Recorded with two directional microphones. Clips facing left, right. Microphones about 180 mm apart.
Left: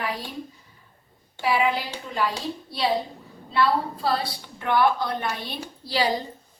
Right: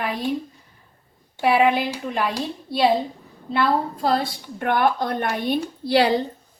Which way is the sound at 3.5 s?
50° right (ahead or behind).